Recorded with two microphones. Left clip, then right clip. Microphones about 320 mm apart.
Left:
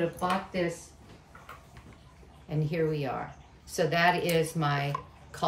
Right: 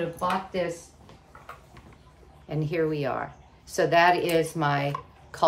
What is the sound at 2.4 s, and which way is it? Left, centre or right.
Speech, right.